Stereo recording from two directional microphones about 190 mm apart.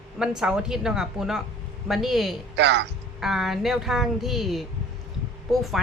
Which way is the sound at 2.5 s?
65° right (ahead or behind).